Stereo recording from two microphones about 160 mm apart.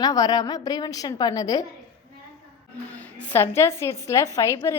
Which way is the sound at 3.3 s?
15° left (ahead or behind).